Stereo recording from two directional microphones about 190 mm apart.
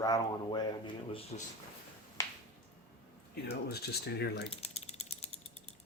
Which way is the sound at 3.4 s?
55° left (ahead or behind).